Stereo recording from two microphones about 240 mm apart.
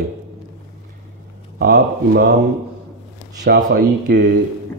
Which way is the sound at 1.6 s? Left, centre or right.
Right.